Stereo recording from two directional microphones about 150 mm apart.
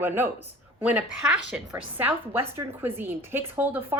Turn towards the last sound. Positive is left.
turn(degrees=-15)  # may be behind; listen again after turning